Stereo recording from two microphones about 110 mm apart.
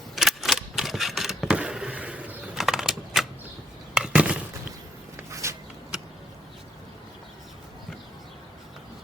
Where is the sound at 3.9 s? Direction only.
10° right (ahead or behind).